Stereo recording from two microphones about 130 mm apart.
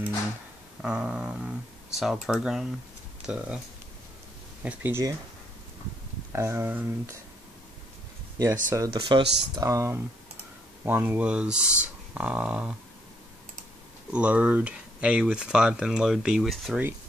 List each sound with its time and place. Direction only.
0.8 s speech: 5° right (ahead or behind)
4.6 s speech: 15° right (ahead or behind)
6.3 s speech: 20° right (ahead or behind)
8.6 s speech: 25° right (ahead or behind); by 12.7 s 5° right (ahead or behind)
14.1 s speech: 10° right (ahead or behind)